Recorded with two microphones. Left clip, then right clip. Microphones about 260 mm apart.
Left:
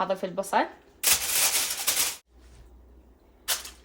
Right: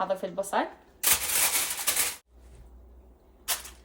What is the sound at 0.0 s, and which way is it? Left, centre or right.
Speech, left.